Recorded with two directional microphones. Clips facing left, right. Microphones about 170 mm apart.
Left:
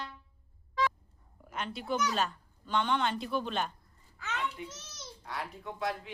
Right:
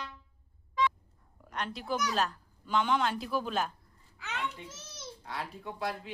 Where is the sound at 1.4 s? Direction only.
Centre (ahead or behind).